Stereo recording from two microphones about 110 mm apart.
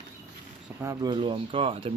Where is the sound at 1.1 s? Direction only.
50° right (ahead or behind).